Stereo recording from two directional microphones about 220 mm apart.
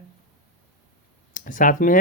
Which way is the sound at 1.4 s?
35° left (ahead or behind).